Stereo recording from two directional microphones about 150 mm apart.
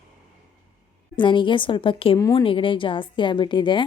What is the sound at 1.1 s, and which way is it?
A woman's voice, 35° left (ahead or behind).